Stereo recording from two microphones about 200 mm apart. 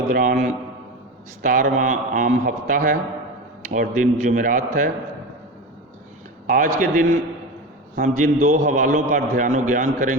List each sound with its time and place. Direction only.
0.1 s a man's voice: 45° right (ahead or behind)
6.7 s a man's voice: 40° right (ahead or behind)